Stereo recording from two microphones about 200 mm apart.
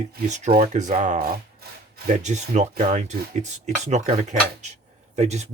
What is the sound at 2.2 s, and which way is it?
Speech, 35° right (ahead or behind).